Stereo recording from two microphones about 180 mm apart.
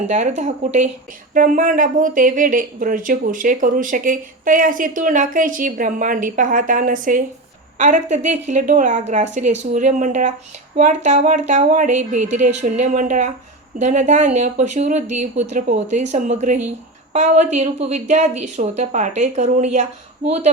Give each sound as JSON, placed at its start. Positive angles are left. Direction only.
{"t": 0.1, "sound": "speech", "side_deg": -40}